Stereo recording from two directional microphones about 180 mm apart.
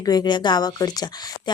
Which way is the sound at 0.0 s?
20° left (ahead or behind).